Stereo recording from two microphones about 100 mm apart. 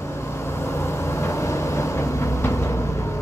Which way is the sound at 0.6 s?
25° left (ahead or behind).